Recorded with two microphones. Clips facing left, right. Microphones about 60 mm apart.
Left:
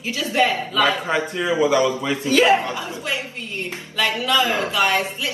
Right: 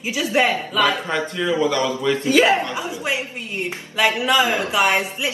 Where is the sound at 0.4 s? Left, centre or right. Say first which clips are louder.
Even; centre.